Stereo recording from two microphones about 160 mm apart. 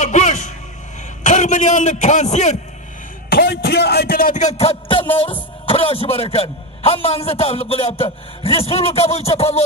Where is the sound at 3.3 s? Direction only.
80° left.